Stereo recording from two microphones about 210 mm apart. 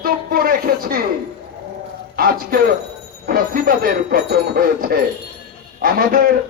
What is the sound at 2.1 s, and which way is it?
Speech, 45° right (ahead or behind).